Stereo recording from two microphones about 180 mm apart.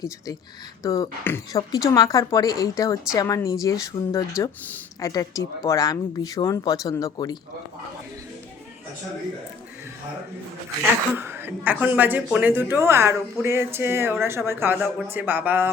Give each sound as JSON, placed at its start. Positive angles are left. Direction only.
{"t": 0.8, "sound": "speech", "side_deg": 20}
{"t": 11.1, "sound": "speech", "side_deg": -10}